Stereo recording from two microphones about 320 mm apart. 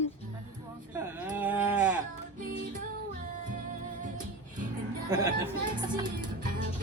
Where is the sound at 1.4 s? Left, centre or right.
Centre.